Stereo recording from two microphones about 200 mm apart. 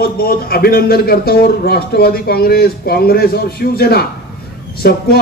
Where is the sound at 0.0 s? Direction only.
50° left (ahead or behind).